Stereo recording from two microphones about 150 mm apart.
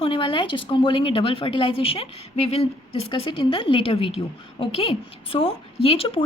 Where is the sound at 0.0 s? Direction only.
35° left (ahead or behind).